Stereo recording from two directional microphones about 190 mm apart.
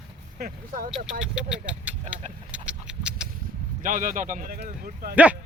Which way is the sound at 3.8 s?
45° right (ahead or behind).